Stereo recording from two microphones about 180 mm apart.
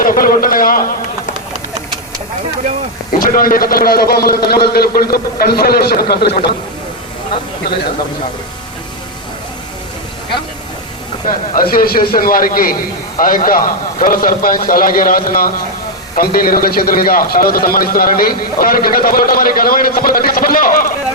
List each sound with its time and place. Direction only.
0.0 s a sound: 50° left (ahead or behind)
3.2 s a man's voice: 50° left (ahead or behind)
11.3 s a man's voice: 50° left (ahead or behind)